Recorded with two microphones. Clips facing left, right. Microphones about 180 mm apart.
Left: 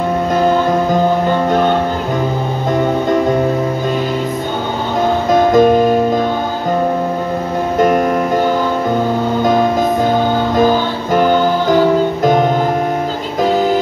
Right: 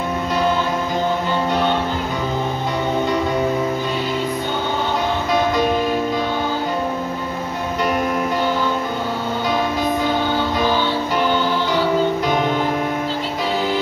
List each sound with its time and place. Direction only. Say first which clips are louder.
1.5 s music: left 5 dB; 45° left (ahead or behind)
5.3 s music: left 9 dB; 45° left (ahead or behind)
10.6 s music: left 6 dB; 45° left (ahead or behind)